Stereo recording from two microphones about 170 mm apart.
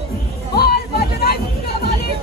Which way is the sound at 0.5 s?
65° left (ahead or behind).